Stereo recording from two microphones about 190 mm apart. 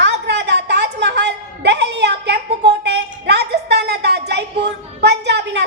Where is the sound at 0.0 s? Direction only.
65° right (ahead or behind).